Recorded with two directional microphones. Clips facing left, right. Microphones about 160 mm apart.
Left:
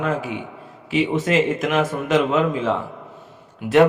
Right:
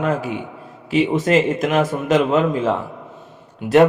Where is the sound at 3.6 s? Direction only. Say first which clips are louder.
Right 4 dB; 25° right (ahead or behind).